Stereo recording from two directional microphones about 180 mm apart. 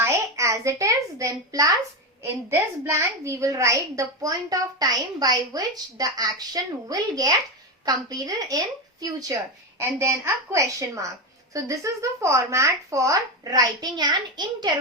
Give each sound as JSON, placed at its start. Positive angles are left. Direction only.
{"t": 0.0, "sound": "a woman's voice", "side_deg": -15}